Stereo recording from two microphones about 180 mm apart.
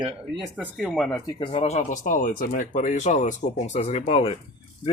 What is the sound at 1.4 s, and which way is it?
Speech, 35° left (ahead or behind).